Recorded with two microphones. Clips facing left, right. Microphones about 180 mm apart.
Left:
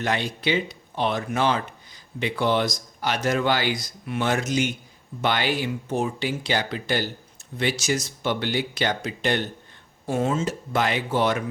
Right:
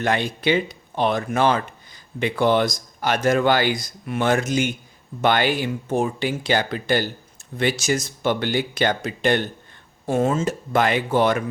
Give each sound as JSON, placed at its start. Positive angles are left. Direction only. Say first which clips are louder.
{"t": 0.0, "sound": "speech", "louder": "right 4 dB", "side_deg": -50}